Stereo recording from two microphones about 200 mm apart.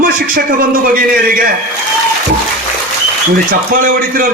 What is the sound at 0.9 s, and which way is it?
Speech, 45° right (ahead or behind).